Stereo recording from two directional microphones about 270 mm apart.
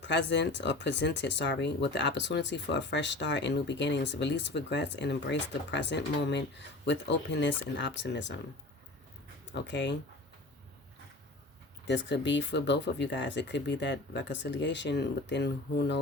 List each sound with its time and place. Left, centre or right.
0.0 s speech: left
9.6 s speech: left
11.9 s speech: left